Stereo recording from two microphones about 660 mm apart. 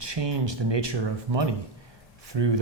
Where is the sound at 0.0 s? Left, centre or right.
Right.